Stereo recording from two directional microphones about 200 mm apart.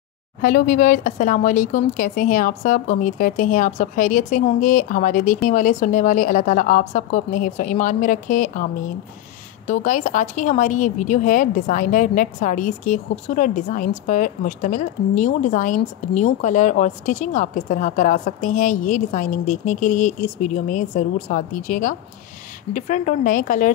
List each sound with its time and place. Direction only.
0.4 s a woman's voice: 45° left (ahead or behind)
9.7 s a woman's voice: 40° left (ahead or behind)